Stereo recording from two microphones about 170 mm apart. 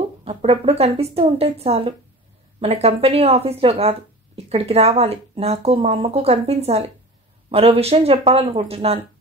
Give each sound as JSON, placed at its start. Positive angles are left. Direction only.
{"t": 0.2, "sound": "speech", "side_deg": -35}